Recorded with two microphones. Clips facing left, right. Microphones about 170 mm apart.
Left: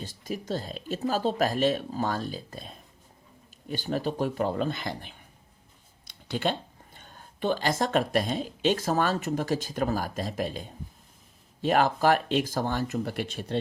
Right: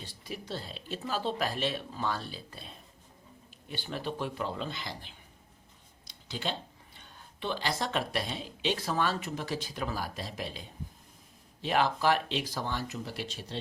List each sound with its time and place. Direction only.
0.0 s speech: 45° left (ahead or behind)